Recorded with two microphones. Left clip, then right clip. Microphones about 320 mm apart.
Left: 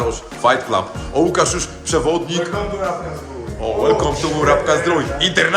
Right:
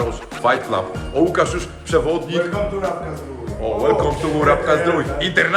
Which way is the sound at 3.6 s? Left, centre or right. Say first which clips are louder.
Left 1 dB; centre.